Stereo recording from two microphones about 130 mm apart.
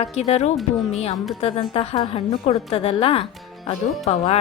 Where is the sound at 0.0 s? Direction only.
55° left (ahead or behind).